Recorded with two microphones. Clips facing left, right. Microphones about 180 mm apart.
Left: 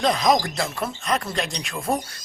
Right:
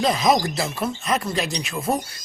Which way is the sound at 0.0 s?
5° right (ahead or behind).